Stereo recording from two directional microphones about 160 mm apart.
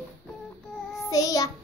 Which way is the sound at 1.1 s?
20° left (ahead or behind).